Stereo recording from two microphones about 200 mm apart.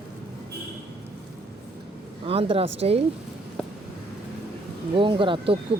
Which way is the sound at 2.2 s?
25° right (ahead or behind).